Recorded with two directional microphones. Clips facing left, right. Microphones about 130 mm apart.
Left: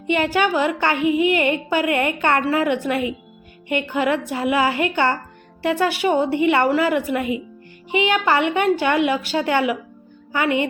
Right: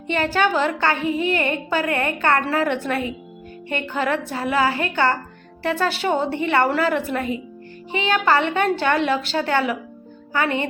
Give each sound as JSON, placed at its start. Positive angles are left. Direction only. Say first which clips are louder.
{"t": 0.1, "sound": "a woman's voice", "louder": "left 1 dB", "side_deg": 15}